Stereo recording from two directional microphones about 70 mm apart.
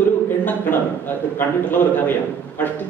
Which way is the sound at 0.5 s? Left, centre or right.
Left.